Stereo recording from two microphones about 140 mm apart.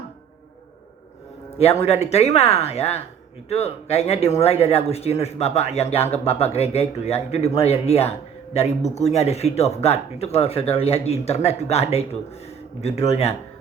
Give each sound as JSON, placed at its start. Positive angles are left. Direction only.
{"t": 1.8, "sound": "speech", "side_deg": 50}